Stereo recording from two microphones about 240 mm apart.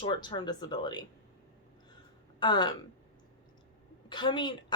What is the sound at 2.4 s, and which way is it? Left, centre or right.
Speech, centre.